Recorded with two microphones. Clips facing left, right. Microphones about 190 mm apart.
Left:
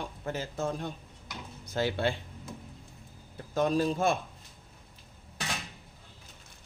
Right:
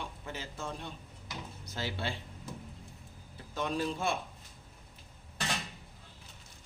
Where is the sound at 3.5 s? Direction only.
40° left (ahead or behind).